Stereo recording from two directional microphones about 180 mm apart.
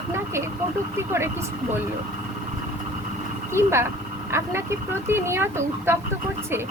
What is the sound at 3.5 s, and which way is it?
A woman's voice, 15° right (ahead or behind).